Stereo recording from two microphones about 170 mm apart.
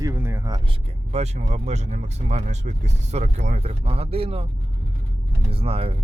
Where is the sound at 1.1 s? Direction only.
40° right (ahead or behind).